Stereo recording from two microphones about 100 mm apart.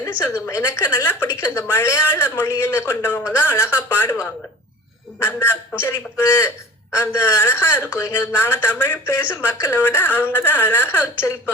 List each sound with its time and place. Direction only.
0.0 s speech: 25° left (ahead or behind)
5.8 s speech: 25° left (ahead or behind)